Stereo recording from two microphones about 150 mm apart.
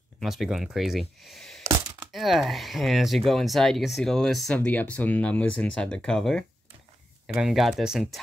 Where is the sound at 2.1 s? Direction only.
Centre (ahead or behind).